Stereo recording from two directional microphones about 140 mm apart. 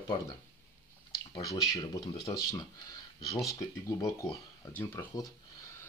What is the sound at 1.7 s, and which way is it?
Speech, 25° left (ahead or behind).